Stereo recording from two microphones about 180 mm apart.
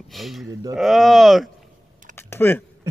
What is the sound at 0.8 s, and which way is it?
Speech, centre (ahead or behind).